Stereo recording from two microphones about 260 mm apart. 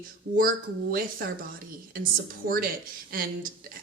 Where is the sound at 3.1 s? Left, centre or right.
Right.